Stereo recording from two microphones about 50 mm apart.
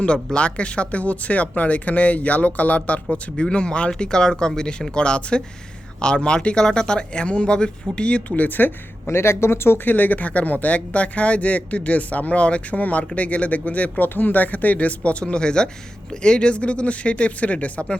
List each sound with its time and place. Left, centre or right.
0.0 s speech: left
8.4 s speech: left